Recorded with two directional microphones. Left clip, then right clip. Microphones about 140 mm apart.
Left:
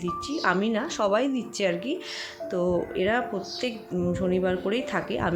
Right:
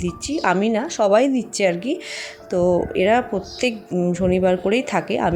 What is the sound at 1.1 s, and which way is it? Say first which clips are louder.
Speech: right 9 dB; 40° right (ahead or behind).